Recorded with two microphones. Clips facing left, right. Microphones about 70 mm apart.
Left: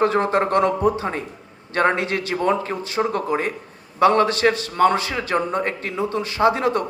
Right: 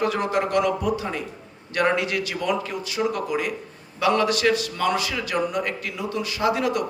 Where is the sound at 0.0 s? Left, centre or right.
Left.